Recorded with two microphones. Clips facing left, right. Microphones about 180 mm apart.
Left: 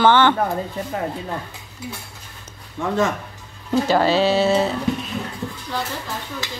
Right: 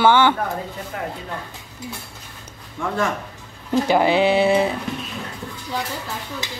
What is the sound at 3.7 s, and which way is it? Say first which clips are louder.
Speech: even; 15° right (ahead or behind).